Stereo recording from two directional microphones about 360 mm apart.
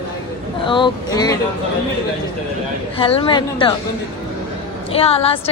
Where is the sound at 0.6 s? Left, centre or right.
Centre.